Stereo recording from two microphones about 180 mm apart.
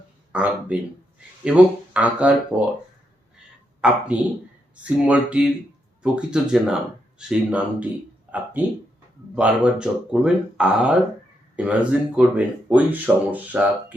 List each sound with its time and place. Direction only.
0.3 s speech: 10° right (ahead or behind)
3.8 s speech: 5° right (ahead or behind)
9.3 s speech: 5° right (ahead or behind)